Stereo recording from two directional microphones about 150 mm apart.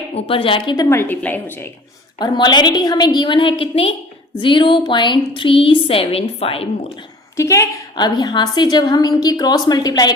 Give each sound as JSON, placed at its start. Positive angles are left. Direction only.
{"t": 0.1, "sound": "a woman's voice", "side_deg": 40}
{"t": 0.9, "sound": "a woman's voice", "side_deg": 15}
{"t": 2.1, "sound": "a woman's voice", "side_deg": 30}
{"t": 7.3, "sound": "a woman's voice", "side_deg": 20}